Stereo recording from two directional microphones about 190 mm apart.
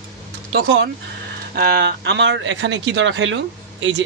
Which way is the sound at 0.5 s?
60° right (ahead or behind).